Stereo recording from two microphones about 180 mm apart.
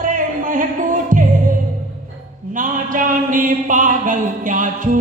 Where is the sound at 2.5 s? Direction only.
45° right (ahead or behind).